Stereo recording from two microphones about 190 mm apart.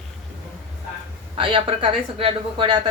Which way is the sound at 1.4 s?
25° right (ahead or behind).